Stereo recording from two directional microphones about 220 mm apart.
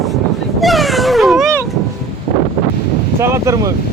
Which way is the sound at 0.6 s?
Centre (ahead or behind).